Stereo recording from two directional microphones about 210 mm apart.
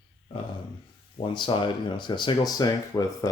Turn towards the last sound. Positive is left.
turn(degrees=15)  # may be behind; listen again after turning